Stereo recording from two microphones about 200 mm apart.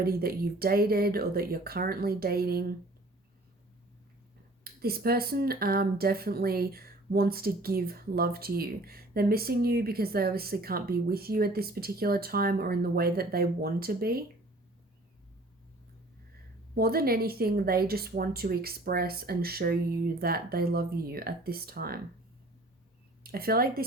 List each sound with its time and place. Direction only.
0.0 s speech: 50° right (ahead or behind)
4.6 s speech: 50° right (ahead or behind)
16.7 s speech: 50° right (ahead or behind)
23.2 s a woman's voice: 50° right (ahead or behind)